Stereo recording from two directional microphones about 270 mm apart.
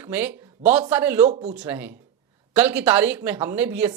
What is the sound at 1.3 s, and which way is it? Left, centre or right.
Speech, right.